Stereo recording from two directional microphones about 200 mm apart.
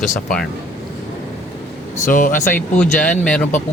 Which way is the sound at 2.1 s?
40° left (ahead or behind).